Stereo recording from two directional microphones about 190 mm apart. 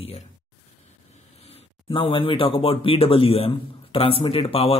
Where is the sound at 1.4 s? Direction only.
30° left (ahead or behind).